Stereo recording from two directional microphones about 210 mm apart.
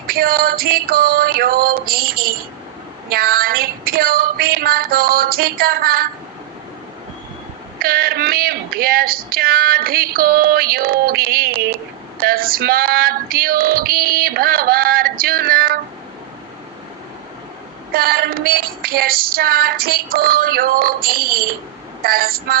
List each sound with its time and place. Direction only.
0.1 s speech: 45° right (ahead or behind)
7.8 s speech: 45° right (ahead or behind)
17.9 s speech: 45° right (ahead or behind)